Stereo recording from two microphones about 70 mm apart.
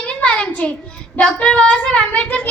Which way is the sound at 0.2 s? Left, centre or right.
Centre.